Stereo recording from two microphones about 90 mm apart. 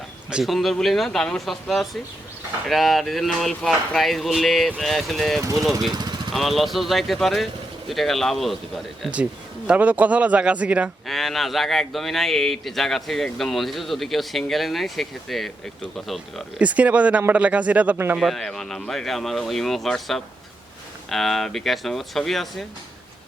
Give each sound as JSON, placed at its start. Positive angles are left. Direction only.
{"t": 0.3, "sound": "speech", "side_deg": -5}
{"t": 5.4, "sound": "speech", "side_deg": -40}
{"t": 5.9, "sound": "vehicle", "side_deg": -50}
{"t": 6.3, "sound": "speech", "side_deg": 0}
{"t": 9.6, "sound": "speech", "side_deg": -15}
{"t": 11.0, "sound": "speech", "side_deg": 0}
{"t": 16.6, "sound": "speech", "side_deg": -15}
{"t": 18.2, "sound": "speech", "side_deg": 0}